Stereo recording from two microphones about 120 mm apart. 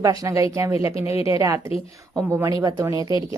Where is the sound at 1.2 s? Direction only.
25° right (ahead or behind).